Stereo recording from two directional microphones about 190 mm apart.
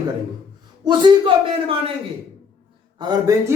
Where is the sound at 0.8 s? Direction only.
25° right (ahead or behind).